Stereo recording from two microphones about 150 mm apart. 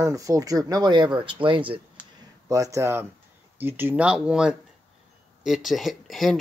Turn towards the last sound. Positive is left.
turn(degrees=0)  # may be behind; listen again after turning